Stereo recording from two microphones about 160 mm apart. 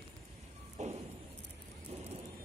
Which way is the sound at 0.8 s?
45° right (ahead or behind).